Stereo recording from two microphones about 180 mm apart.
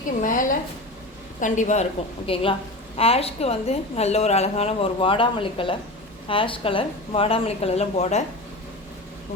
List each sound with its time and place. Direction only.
0.2 s a woman's voice: 45° left (ahead or behind)